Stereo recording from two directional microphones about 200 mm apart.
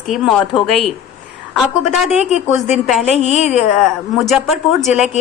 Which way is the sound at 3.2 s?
35° left (ahead or behind).